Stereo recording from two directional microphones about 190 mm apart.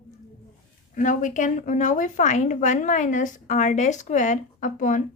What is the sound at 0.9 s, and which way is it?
A woman's voice, 45° left (ahead or behind).